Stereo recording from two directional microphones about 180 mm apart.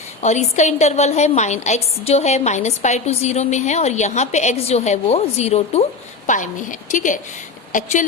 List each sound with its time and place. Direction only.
0.2 s a woman's voice: 40° left (ahead or behind)